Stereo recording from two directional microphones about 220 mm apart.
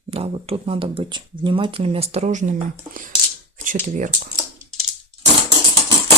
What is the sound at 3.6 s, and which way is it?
Speech, 35° right (ahead or behind).